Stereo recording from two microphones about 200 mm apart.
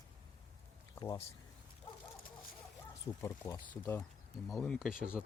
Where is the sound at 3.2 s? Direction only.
15° left (ahead or behind).